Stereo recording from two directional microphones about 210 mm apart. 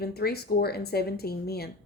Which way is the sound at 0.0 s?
50° left (ahead or behind).